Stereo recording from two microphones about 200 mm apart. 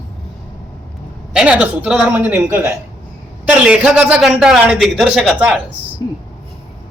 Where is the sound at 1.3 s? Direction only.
5° right (ahead or behind).